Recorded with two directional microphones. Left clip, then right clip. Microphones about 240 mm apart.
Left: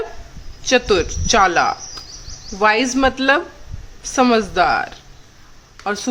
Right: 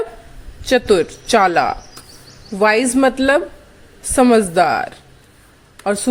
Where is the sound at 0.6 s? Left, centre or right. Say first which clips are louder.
Right 2 dB; right.